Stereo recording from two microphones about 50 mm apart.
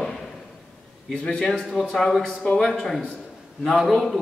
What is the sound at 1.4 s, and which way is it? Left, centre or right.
A man's voice, centre.